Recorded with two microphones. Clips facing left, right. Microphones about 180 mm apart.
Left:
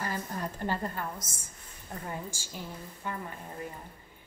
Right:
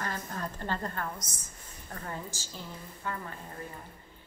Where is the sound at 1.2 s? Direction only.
25° left (ahead or behind).